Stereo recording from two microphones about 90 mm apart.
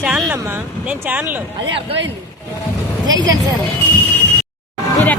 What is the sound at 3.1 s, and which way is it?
Speech, 45° right (ahead or behind).